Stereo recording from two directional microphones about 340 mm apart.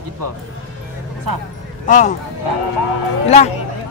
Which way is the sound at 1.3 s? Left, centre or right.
Right.